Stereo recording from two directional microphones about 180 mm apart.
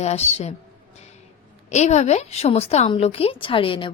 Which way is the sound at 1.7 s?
40° left (ahead or behind).